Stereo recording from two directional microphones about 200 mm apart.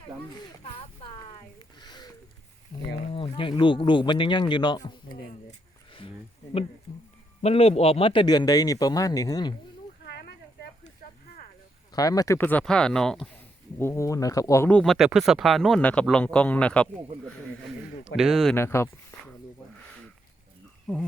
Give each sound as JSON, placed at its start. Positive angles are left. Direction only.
{"t": 1.8, "sound": "a sound", "side_deg": 20}
{"t": 2.8, "sound": "speech", "side_deg": 25}
{"t": 5.5, "sound": "a sound", "side_deg": 25}
{"t": 7.4, "sound": "speech", "side_deg": 30}
{"t": 10.0, "sound": "a sound", "side_deg": 55}
{"t": 11.9, "sound": "speech", "side_deg": 20}
{"t": 13.7, "sound": "speech", "side_deg": 15}
{"t": 18.2, "sound": "speech", "side_deg": 0}
{"t": 18.5, "sound": "speech", "side_deg": 10}
{"t": 20.8, "sound": "speech", "side_deg": 0}